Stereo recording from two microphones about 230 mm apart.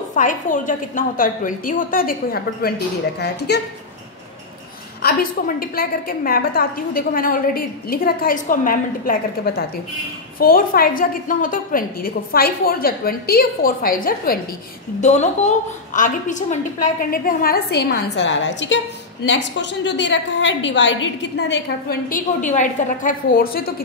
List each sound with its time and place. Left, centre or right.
0.1 s a woman's voice: left
5.0 s a woman's voice: left